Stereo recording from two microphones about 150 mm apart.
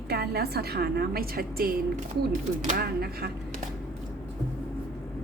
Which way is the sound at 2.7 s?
90° right.